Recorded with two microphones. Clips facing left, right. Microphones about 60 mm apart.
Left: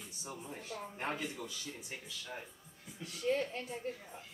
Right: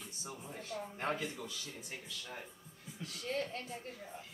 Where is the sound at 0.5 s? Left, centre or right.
Centre.